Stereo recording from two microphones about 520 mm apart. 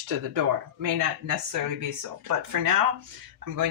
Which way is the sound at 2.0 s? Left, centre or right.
Right.